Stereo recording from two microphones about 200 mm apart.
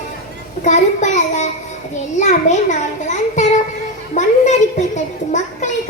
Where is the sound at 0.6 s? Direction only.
35° left (ahead or behind).